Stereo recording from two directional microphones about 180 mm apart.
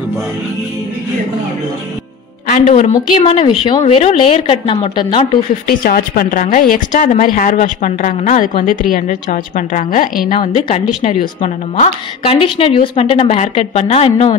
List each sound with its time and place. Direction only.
2.4 s a woman's voice: 45° left (ahead or behind); by 5.4 s 30° left (ahead or behind)
5.7 s a woman's voice: 50° left (ahead or behind); by 14.3 s 35° left (ahead or behind)